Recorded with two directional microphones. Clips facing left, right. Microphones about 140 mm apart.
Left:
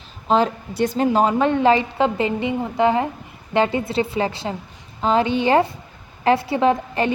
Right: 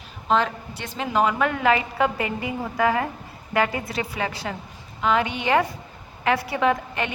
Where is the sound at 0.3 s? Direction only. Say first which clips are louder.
Left 4 dB; 35° left (ahead or behind).